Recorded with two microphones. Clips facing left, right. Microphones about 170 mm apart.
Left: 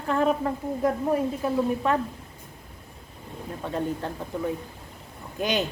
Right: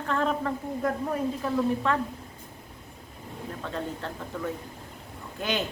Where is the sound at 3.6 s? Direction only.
15° left (ahead or behind).